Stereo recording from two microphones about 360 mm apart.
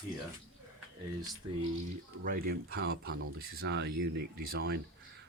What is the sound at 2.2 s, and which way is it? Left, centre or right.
Speech, right.